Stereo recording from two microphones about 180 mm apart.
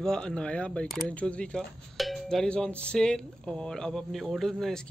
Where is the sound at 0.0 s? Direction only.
5° left (ahead or behind).